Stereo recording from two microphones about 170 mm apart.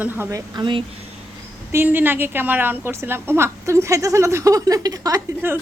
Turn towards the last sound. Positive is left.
turn(degrees=-15)  # may be behind; listen again after turning